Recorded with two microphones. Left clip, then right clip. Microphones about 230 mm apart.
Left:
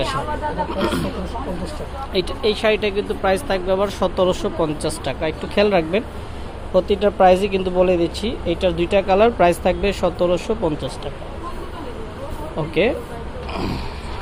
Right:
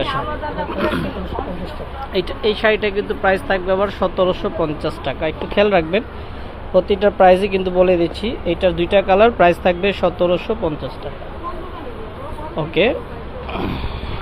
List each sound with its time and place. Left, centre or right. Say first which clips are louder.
0.7 s speech: right 2 dB; centre
2.1 s speech: right 1 dB; centre
10.6 s speech: even; left
12.5 s speech: right 2 dB; centre